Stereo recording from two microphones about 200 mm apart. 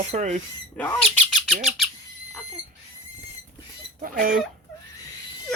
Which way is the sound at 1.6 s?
Centre (ahead or behind).